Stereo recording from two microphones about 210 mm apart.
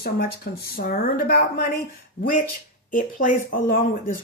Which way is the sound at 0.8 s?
45° left (ahead or behind).